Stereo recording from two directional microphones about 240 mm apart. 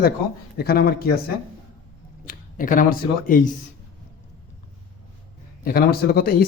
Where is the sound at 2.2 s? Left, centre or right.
Left.